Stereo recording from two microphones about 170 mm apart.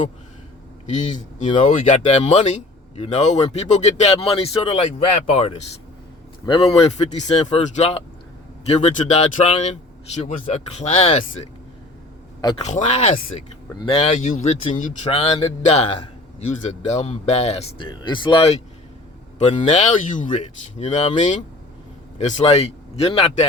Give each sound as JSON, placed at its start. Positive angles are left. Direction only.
{"t": 0.9, "sound": "speech", "side_deg": 45}
{"t": 12.4, "sound": "speech", "side_deg": 25}
{"t": 12.6, "sound": "speech", "side_deg": 45}
{"t": 13.7, "sound": "speech", "side_deg": 35}
{"t": 14.2, "sound": "speech", "side_deg": 50}
{"t": 15.1, "sound": "speech", "side_deg": 35}